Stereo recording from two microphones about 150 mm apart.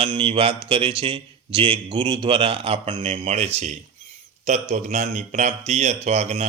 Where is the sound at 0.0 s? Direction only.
35° right (ahead or behind).